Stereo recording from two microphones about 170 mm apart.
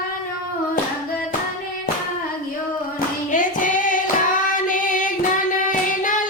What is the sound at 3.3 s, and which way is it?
Female singing, 50° left (ahead or behind).